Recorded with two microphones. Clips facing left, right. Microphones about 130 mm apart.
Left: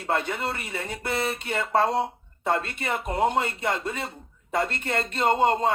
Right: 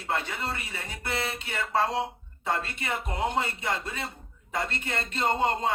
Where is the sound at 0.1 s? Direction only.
50° left (ahead or behind).